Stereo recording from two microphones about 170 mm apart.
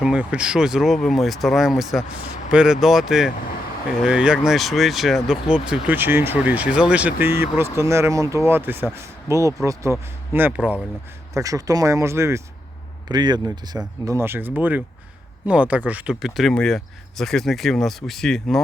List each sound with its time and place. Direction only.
0.0 s speech: 5° right (ahead or behind)
11.3 s speech: 20° right (ahead or behind); by 18.6 s centre (ahead or behind)